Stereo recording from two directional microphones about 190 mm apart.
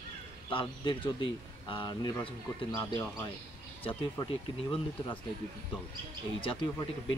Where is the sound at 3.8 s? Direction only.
25° left (ahead or behind).